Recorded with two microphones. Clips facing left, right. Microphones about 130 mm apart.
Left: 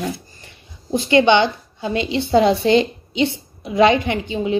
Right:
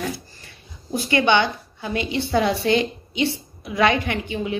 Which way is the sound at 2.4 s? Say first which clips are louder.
Left 6 dB; 55° left (ahead or behind).